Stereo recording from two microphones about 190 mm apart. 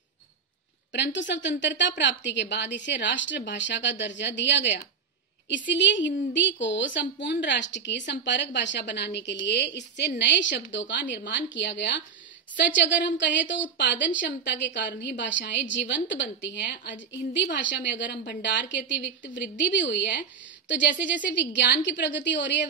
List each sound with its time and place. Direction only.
0.9 s a woman's voice: 65° left (ahead or behind)
5.7 s a woman's voice: 70° left (ahead or behind)